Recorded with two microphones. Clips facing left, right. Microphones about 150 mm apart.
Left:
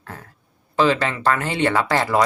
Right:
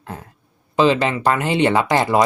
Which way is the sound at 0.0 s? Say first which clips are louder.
Right 4 dB; 20° right (ahead or behind).